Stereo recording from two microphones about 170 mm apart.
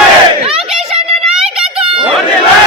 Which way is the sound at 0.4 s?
35° right (ahead or behind).